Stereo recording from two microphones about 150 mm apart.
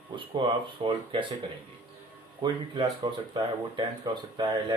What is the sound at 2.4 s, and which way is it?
Speech, 30° right (ahead or behind).